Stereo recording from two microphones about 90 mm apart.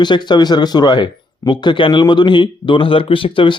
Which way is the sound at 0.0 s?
55° left (ahead or behind).